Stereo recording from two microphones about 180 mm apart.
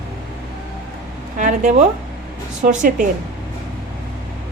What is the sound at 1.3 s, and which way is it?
A woman's voice, 45° right (ahead or behind).